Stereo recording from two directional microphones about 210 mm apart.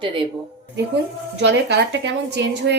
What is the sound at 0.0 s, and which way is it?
Speech, 25° right (ahead or behind).